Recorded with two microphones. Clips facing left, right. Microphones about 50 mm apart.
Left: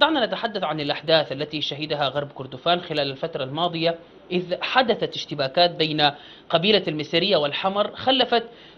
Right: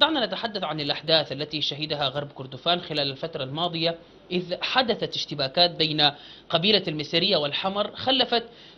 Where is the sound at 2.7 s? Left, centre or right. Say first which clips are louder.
Left 4 dB; centre.